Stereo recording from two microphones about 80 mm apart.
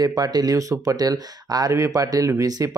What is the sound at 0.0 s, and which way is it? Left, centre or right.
Speech, right.